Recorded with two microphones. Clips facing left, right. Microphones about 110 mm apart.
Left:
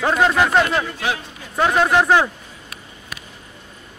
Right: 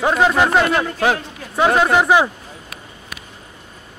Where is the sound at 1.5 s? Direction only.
5° right (ahead or behind).